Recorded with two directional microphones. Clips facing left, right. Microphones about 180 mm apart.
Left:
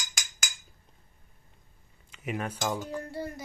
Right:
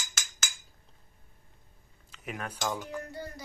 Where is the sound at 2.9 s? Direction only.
30° left (ahead or behind).